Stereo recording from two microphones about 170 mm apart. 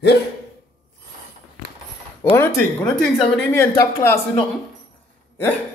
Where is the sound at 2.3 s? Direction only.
15° left (ahead or behind).